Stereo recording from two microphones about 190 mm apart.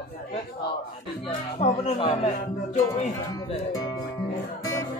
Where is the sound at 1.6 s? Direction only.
30° left (ahead or behind).